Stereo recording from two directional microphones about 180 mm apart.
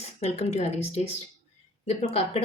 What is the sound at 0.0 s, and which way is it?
A woman's voice, 35° left (ahead or behind).